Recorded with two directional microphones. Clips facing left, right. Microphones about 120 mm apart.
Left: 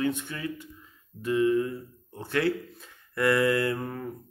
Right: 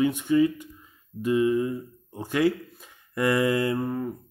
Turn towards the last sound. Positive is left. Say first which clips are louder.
# right 3 dB
turn(degrees=-15)  # may be behind; listen again after turning